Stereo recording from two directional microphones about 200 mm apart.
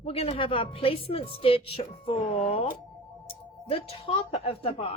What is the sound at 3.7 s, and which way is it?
A woman's voice, 30° left (ahead or behind).